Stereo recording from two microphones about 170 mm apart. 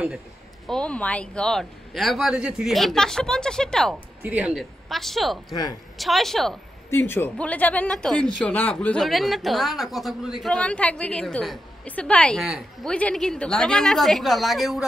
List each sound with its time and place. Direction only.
0.7 s a woman's voice: 5° left (ahead or behind)
4.2 s speech: 10° right (ahead or behind)
4.6 s a woman's voice: centre (ahead or behind)
5.5 s a woman's voice: 20° left (ahead or behind)
5.9 s a woman's voice: centre (ahead or behind)
6.9 s a woman's voice: 10° left (ahead or behind)